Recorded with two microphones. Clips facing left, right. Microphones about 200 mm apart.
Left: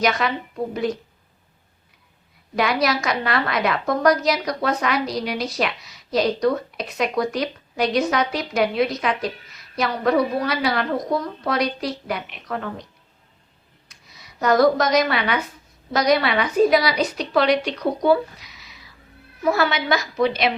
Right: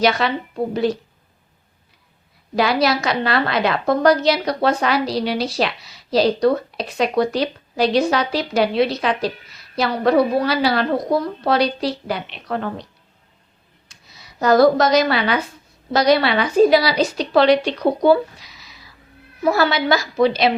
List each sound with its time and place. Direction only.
0.0 s a woman's voice: 30° right (ahead or behind)
2.6 s a woman's voice: 30° right (ahead or behind)
14.4 s a woman's voice: 30° right (ahead or behind)
19.4 s a woman's voice: 35° right (ahead or behind)